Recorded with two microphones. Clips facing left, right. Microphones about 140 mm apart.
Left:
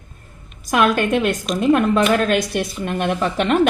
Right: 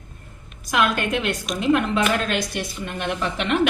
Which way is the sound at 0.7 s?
45° left (ahead or behind).